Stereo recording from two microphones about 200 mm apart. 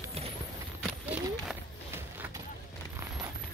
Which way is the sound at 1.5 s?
10° right (ahead or behind).